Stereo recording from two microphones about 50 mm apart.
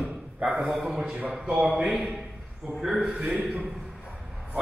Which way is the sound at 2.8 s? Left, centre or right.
Centre.